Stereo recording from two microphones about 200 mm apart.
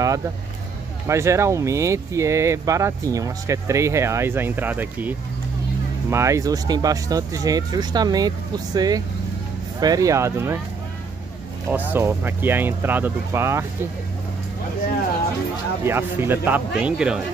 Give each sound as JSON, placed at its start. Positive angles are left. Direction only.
{"t": 1.0, "sound": "speech", "side_deg": -15}
{"t": 11.7, "sound": "speech", "side_deg": -10}
{"t": 15.8, "sound": "speech", "side_deg": -10}